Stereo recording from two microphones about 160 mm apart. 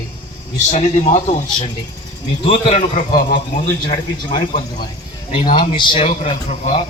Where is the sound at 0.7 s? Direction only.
45° left (ahead or behind).